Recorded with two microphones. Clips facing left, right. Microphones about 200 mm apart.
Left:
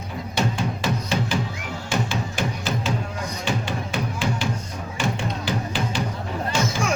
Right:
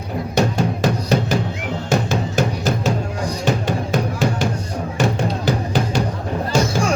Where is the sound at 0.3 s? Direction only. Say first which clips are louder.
Right 6 dB; 40° right (ahead or behind).